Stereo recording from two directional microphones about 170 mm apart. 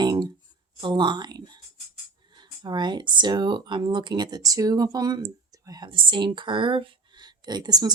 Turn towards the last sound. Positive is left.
turn(degrees=-25)  # may be behind; listen again after turning